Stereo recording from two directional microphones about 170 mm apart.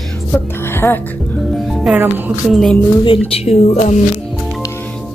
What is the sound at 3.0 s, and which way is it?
Speech, 35° left (ahead or behind).